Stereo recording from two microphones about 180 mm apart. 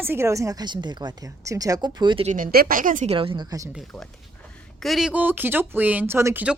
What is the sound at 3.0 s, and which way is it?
Speech, 30° right (ahead or behind).